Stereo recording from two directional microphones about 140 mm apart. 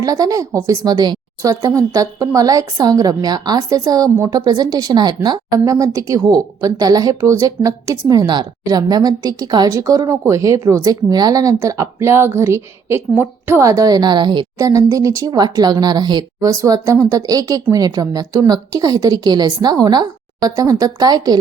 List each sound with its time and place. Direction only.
0.0 s a woman's voice: 25° right (ahead or behind)
14.6 s a woman's voice: 20° right (ahead or behind)